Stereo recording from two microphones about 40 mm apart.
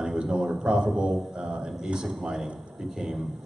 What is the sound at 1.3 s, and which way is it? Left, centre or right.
Mantra, centre.